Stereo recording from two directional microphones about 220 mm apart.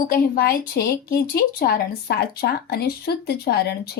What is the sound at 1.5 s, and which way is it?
Speech, 45° left (ahead or behind).